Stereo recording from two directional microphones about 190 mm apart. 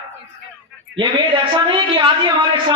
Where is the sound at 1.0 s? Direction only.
25° right (ahead or behind).